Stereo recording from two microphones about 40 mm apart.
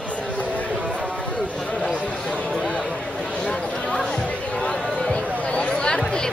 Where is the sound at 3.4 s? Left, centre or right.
Left.